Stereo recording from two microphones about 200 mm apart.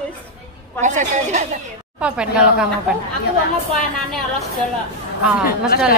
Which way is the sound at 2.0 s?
5° right (ahead or behind).